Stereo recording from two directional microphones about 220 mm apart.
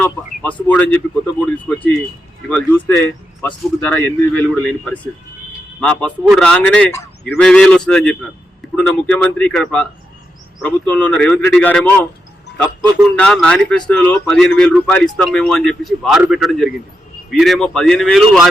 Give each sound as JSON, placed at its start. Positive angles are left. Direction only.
{"t": 0.0, "sound": "speech", "side_deg": 5}